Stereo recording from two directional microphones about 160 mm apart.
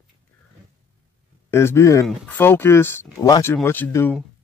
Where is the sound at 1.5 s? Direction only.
15° left (ahead or behind).